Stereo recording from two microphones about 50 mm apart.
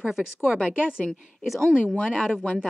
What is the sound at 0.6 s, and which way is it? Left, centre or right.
Speech, centre.